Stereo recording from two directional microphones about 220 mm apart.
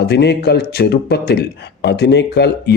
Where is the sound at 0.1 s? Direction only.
50° left (ahead or behind).